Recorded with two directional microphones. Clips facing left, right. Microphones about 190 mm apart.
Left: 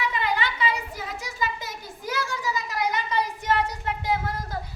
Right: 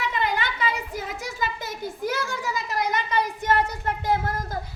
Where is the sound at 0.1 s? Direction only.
45° right (ahead or behind).